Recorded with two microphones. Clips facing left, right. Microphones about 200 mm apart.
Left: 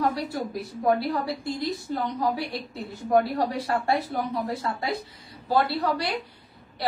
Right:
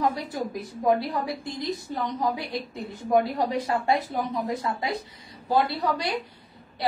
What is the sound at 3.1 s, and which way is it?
A woman's voice, 15° right (ahead or behind).